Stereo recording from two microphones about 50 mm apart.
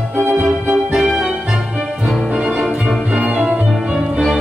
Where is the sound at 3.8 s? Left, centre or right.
Centre.